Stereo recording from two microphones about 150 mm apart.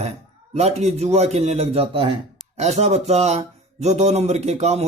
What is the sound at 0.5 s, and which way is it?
Speech, 45° right (ahead or behind).